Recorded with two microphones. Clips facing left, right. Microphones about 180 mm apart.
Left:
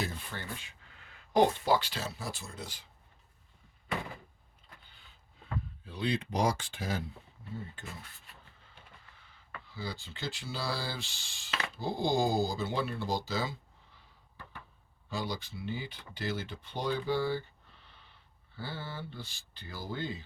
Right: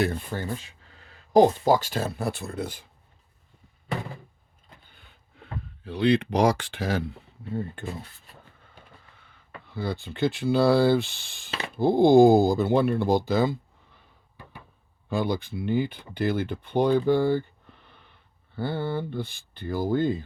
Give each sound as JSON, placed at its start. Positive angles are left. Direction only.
{"t": 0.3, "sound": "speech", "side_deg": -45}
{"t": 4.9, "sound": "a sound", "side_deg": -60}
{"t": 5.8, "sound": "speech", "side_deg": -70}
{"t": 8.3, "sound": "vehicle", "side_deg": -35}
{"t": 9.6, "sound": "speech", "side_deg": -60}
{"t": 15.1, "sound": "speech", "side_deg": -55}